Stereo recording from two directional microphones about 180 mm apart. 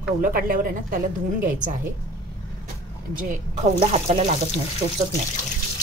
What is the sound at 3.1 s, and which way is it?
Speech, 45° right (ahead or behind).